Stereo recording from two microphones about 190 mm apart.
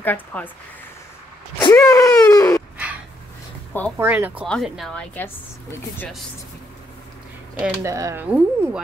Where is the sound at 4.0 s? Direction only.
10° right (ahead or behind).